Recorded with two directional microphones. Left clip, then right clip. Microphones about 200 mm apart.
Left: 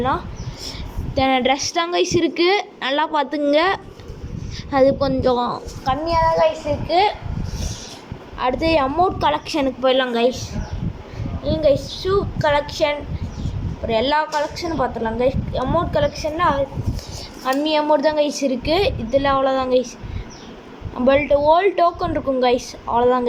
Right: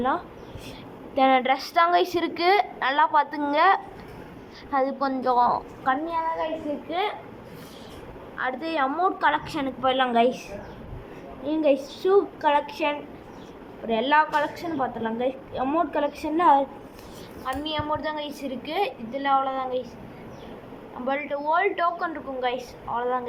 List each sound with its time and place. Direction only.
1.1 s a woman's voice: centre (ahead or behind)
1.4 s a woman's voice: 15° left (ahead or behind)
8.4 s a woman's voice: 15° left (ahead or behind)
11.4 s a woman's voice: 5° right (ahead or behind)
16.2 s a woman's voice: 20° right (ahead or behind)
17.4 s a woman's voice: 25° left (ahead or behind)
21.0 s a woman's voice: 20° left (ahead or behind)